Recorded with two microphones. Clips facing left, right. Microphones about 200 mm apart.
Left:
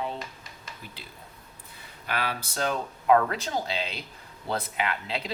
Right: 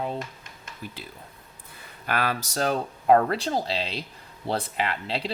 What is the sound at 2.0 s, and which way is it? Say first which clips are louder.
Speech: right 4 dB; 50° right (ahead or behind).